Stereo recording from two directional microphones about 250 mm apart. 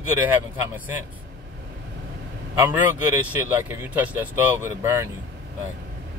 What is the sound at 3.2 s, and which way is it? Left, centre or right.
Speech, centre.